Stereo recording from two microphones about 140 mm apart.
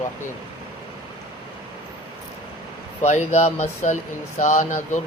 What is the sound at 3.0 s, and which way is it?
Speech, 50° left (ahead or behind).